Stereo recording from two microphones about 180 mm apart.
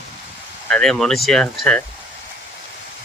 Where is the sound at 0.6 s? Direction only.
5° left (ahead or behind).